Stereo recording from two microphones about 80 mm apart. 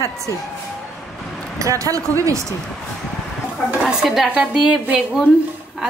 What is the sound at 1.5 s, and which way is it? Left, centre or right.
Speech, right.